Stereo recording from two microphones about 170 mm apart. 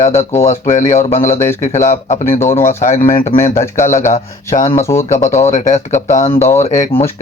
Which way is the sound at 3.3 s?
30° left (ahead or behind).